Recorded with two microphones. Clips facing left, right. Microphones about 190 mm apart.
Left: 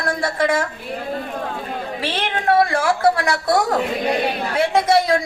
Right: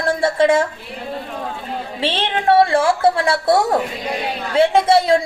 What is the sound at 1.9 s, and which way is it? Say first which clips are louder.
A woman's voice: right 4 dB; 25° right (ahead or behind).